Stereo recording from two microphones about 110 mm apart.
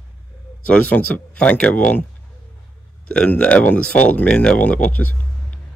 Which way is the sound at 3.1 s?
10° left (ahead or behind).